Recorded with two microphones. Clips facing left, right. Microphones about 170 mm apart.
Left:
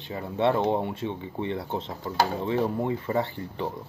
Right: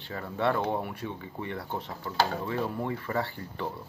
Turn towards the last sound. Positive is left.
turn(degrees=20)  # may be behind; listen again after turning